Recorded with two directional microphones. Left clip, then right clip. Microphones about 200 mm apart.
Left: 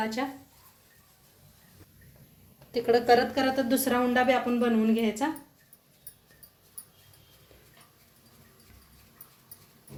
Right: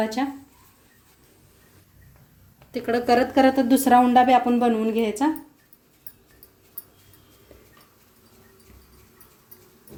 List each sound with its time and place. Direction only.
0.2 s a woman's voice: 50° right (ahead or behind)
2.7 s a woman's voice: 50° right (ahead or behind)